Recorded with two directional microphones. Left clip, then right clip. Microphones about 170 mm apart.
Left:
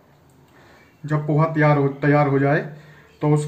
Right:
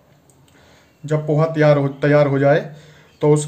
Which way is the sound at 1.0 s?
30° right (ahead or behind).